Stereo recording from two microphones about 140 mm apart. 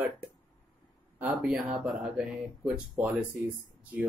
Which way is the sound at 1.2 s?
10° right (ahead or behind).